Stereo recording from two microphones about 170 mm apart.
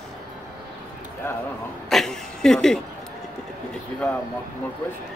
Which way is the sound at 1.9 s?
Centre (ahead or behind).